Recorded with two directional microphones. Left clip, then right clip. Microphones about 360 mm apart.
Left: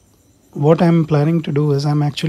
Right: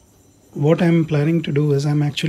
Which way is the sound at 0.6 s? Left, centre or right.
Centre.